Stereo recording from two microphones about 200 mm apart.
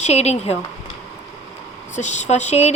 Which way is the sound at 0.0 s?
35° left (ahead or behind).